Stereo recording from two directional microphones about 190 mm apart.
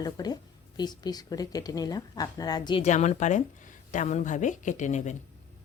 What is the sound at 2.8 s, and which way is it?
Speech, 35° left (ahead or behind).